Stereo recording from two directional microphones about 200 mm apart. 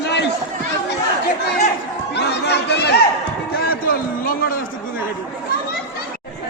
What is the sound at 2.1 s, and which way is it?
Chatter, 55° left (ahead or behind).